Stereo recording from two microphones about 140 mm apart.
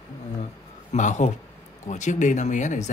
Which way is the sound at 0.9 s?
60° left (ahead or behind).